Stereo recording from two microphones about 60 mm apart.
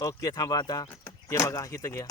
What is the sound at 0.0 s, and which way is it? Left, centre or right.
Speech, left.